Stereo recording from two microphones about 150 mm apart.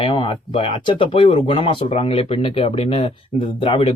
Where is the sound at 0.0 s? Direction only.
35° left (ahead or behind).